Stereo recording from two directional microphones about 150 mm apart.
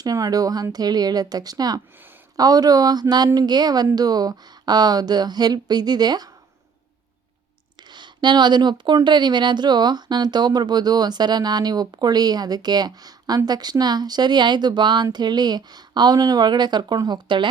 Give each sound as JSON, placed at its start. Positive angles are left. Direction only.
{"t": 0.0, "sound": "speech", "side_deg": -25}
{"t": 7.9, "sound": "speech", "side_deg": -30}